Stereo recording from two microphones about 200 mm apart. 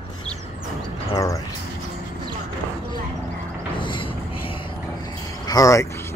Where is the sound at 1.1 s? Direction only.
15° left (ahead or behind).